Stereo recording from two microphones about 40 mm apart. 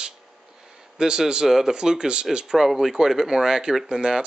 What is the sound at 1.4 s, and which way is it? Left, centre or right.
Speech, centre.